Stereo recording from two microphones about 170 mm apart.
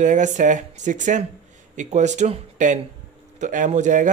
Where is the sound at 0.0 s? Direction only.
45° right (ahead or behind).